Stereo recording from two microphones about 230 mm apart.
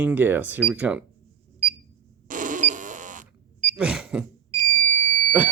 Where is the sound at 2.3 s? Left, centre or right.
Right.